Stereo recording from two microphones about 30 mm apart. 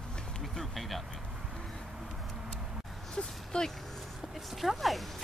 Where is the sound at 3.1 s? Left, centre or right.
Left.